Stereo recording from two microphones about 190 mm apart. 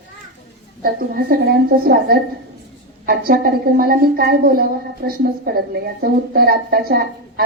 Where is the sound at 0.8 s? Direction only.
50° right (ahead or behind).